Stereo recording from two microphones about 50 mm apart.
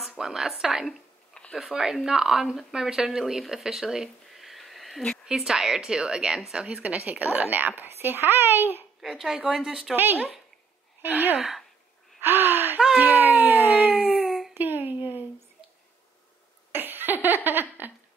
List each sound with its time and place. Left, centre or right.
0.2 s a woman's voice: centre
1.3 s a sound: left
1.7 s a woman's voice: centre
5.2 s a woman's voice: centre
6.8 s speech: right
9.0 s a woman's voice: centre
9.4 s a woman's voice: centre
9.9 s speech: right
11.3 s a woman's voice: centre
12.2 s gasp: right
13.0 s a sound: right
14.5 s a sound: right
16.7 s laughter: right